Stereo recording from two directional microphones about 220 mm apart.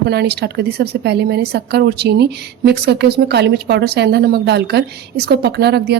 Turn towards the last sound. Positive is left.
turn(degrees=-50)  # may be behind; listen again after turning